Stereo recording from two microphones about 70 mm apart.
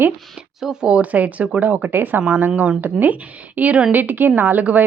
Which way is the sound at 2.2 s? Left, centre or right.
Centre.